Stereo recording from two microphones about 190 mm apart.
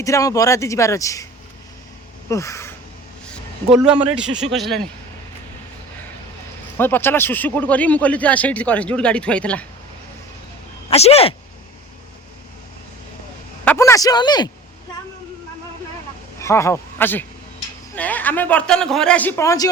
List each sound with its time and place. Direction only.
0.0 s speech: 15° left (ahead or behind)
2.3 s speech: 15° left (ahead or behind)
3.8 s a man's voice: 5° right (ahead or behind)
6.7 s speech: 10° left (ahead or behind)
10.8 s speech: 35° left (ahead or behind)
13.7 s speech: 15° left (ahead or behind)
16.4 s a man's voice: 15° left (ahead or behind)